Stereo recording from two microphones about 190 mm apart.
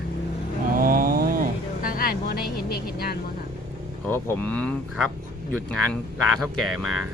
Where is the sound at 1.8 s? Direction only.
50° left (ahead or behind).